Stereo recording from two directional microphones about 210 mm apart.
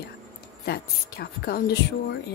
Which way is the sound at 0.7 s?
50° left (ahead or behind).